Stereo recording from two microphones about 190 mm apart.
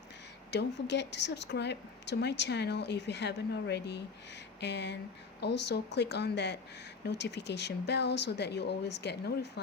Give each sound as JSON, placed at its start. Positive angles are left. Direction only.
{"t": 0.5, "sound": "speech", "side_deg": 65}